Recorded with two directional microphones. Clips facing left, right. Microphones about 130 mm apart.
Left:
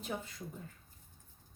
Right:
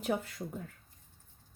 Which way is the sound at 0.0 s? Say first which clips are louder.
Right 8 dB; 65° right (ahead or behind).